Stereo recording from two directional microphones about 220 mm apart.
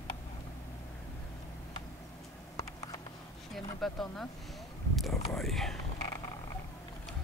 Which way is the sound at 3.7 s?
Centre (ahead or behind).